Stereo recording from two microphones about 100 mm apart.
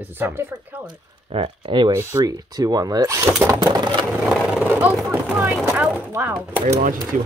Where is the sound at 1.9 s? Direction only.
40° right (ahead or behind).